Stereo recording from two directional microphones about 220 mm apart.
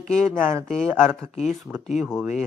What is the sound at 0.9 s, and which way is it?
Speech, 10° right (ahead or behind).